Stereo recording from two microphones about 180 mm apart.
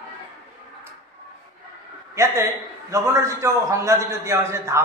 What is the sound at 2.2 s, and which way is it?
A man's voice, 15° right (ahead or behind).